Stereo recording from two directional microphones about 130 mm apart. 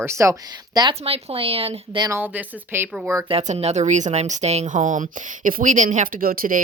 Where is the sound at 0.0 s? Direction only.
20° right (ahead or behind).